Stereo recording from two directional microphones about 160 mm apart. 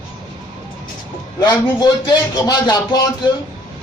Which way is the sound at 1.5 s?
25° left (ahead or behind).